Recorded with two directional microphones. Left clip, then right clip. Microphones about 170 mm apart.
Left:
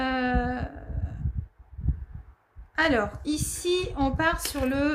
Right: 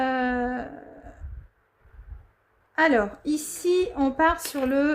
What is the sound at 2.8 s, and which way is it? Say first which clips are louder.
A woman's voice: right 3 dB; 40° right (ahead or behind).